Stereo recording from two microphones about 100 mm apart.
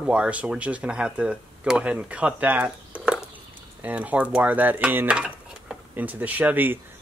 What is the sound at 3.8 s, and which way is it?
Dishes, 15° right (ahead or behind).